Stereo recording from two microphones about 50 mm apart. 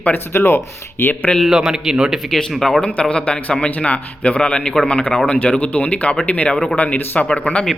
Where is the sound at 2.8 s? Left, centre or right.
Left.